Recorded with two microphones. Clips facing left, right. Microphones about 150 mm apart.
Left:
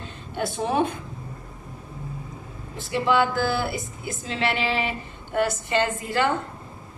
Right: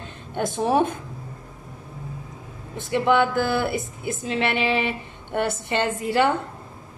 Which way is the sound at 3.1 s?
55° right (ahead or behind).